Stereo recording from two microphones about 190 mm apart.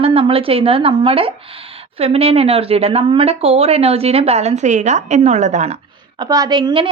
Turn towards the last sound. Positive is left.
turn(degrees=-25)  # may be behind; listen again after turning